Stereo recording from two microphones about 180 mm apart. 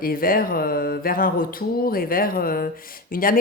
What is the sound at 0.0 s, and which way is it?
Speech, 55° left (ahead or behind).